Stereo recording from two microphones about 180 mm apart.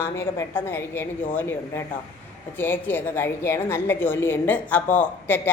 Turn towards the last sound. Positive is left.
turn(degrees=10)  # may be behind; listen again after turning